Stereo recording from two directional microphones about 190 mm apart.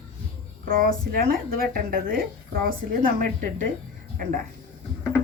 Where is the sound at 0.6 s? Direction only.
45° right (ahead or behind).